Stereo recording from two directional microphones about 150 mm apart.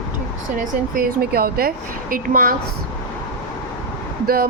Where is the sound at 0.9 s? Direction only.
90° right; by 2.6 s 70° right (ahead or behind).